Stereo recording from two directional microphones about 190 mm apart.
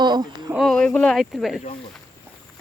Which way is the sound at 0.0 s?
20° right (ahead or behind).